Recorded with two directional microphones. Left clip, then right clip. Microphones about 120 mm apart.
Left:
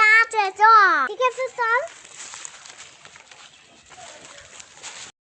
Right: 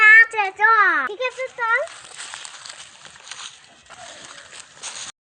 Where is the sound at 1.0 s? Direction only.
30° left (ahead or behind).